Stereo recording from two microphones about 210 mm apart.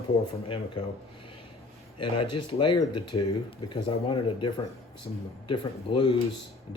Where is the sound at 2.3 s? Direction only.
20° left (ahead or behind).